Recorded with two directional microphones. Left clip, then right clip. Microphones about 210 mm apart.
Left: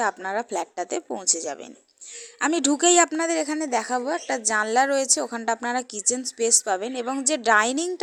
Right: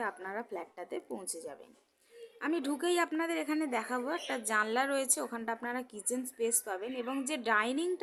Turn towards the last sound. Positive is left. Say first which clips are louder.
# left 11 dB
turn(degrees=30)  # may be behind; listen again after turning